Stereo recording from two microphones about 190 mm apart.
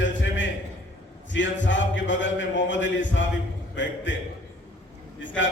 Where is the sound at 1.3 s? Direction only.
75° left (ahead or behind).